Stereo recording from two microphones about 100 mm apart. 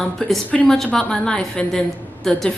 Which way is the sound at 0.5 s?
15° left (ahead or behind).